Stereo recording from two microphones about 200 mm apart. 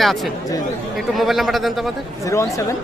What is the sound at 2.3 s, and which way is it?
Speech, 15° left (ahead or behind).